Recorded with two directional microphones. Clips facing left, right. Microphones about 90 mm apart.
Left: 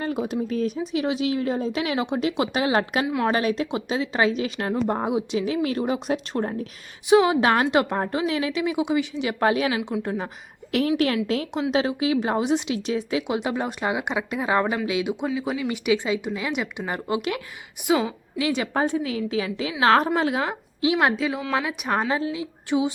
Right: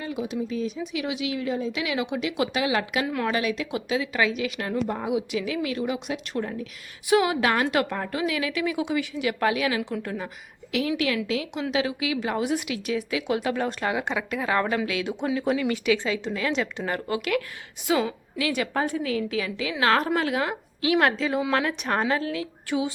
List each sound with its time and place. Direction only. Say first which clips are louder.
0.0 s speech: left 3 dB; 45° left (ahead or behind)
0.8 s a woman's voice: left 5 dB; 35° left (ahead or behind)
7.1 s a woman's voice: left 4 dB; 25° left (ahead or behind)
10.7 s a woman's voice: left 4 dB; 45° left (ahead or behind); by 15.1 s 20° left (ahead or behind)
15.4 s speech: right 2 dB; 5° left (ahead or behind)
15.7 s a woman's voice: left 1 dB; 20° left (ahead or behind)
21.2 s speech: right 1 dB; 5° left (ahead or behind); by 22.9 s 20° left (ahead or behind)